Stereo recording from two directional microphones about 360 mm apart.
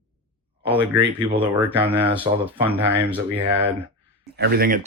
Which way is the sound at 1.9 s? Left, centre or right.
Centre.